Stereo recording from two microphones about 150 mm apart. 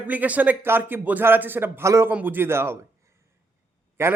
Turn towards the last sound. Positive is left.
turn(degrees=-15)  # may be behind; listen again after turning